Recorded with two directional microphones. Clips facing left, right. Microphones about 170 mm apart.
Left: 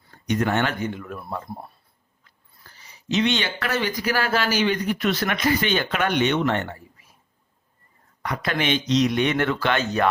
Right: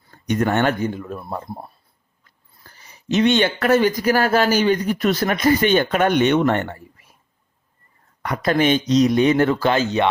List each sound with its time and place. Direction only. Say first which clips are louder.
0.3 s speech: right 4 dB; 50° right (ahead or behind); by 1.4 s 30° right (ahead or behind)
2.7 s speech: right 4 dB; 50° right (ahead or behind)
8.2 s speech: right 7 dB; 45° right (ahead or behind); by 10.1 s 30° right (ahead or behind)